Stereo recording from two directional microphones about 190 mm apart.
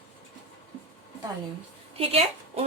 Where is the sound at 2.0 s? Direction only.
30° right (ahead or behind).